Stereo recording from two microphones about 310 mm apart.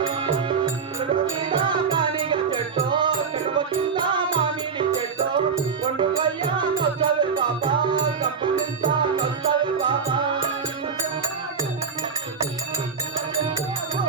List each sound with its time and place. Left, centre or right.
1.5 s music: centre